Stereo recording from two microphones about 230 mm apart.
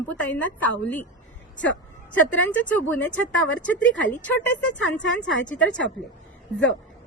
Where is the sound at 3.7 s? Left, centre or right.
Left.